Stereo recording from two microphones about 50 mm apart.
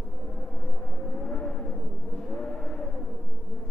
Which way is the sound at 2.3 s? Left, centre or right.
Centre.